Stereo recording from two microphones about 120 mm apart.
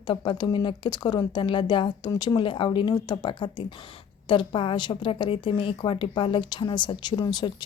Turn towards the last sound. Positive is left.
turn(degrees=35)  # may be behind; listen again after turning